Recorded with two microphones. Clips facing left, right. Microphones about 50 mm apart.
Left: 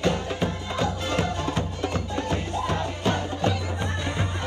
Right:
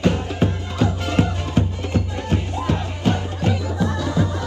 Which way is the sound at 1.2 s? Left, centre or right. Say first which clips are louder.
Right 9 dB; right.